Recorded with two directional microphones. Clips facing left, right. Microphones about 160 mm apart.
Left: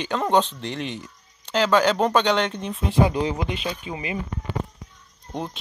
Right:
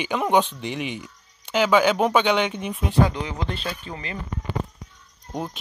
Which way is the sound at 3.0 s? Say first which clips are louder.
Left 3 dB; 20° left (ahead or behind).